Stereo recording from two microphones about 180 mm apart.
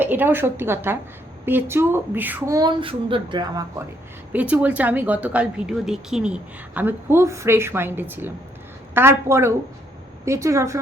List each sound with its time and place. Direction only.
0.0 s a woman's voice: 10° right (ahead or behind)
2.6 s a child's voice: 25° right (ahead or behind)
4.3 s a woman's voice: 10° right (ahead or behind)